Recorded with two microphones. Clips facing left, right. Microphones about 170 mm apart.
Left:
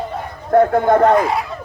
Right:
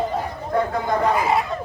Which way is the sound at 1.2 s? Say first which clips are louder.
Left 1 dB; centre (ahead or behind).